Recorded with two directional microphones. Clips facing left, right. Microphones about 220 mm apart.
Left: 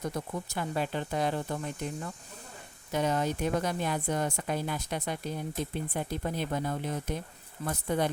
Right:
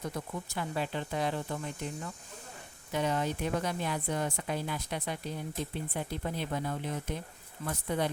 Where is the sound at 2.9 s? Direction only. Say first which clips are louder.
Left 2 dB; 45° left (ahead or behind).